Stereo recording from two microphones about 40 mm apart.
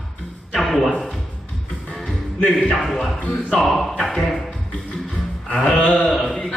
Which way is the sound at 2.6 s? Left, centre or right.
Centre.